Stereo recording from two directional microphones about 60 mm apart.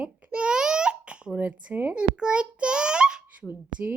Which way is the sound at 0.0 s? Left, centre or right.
Right.